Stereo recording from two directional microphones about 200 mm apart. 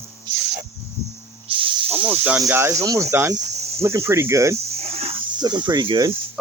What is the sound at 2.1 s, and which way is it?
Speech, 10° right (ahead or behind).